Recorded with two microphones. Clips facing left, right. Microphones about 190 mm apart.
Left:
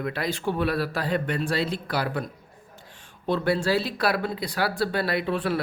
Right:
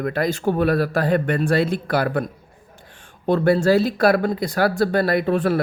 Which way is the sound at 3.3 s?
45° right (ahead or behind).